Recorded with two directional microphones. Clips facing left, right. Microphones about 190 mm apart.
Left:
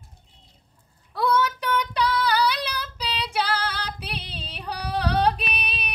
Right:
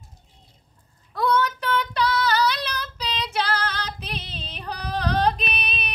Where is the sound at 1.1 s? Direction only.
10° left (ahead or behind).